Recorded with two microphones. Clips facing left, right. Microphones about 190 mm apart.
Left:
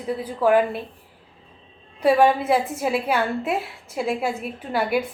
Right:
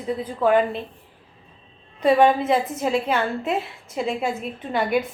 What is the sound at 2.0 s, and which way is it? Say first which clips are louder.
A woman's voice: even; 5° left (ahead or behind).